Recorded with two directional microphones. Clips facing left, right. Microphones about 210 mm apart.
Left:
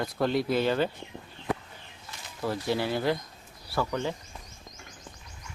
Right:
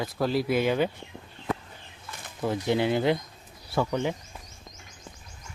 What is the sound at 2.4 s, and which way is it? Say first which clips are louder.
Speech: right 4 dB; 20° right (ahead or behind).